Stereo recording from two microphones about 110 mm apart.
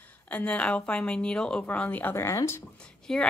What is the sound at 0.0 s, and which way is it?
A woman's voice, 15° left (ahead or behind).